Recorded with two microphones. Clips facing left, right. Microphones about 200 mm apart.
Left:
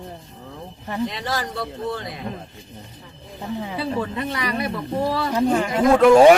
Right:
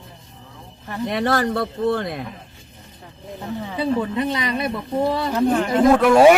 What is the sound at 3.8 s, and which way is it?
Speech, 20° right (ahead or behind).